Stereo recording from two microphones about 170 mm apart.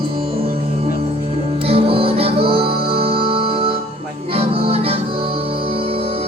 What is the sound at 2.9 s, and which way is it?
Organ, 35° right (ahead or behind).